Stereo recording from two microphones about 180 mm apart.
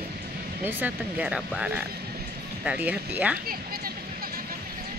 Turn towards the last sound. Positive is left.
turn(degrees=-5)  # may be behind; listen again after turning